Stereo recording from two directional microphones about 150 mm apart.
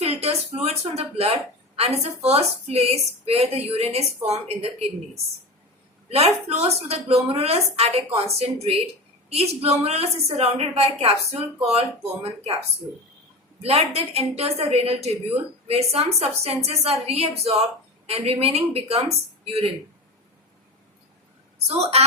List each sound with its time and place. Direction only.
0.0 s a woman's voice: 40° right (ahead or behind)
6.1 s a woman's voice: 45° right (ahead or behind)
13.6 s a woman's voice: 40° right (ahead or behind)
21.7 s a woman's voice: 45° right (ahead or behind)